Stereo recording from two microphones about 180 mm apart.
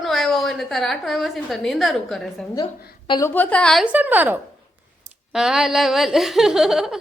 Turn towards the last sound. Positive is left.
turn(degrees=0)  # may be behind; listen again after turning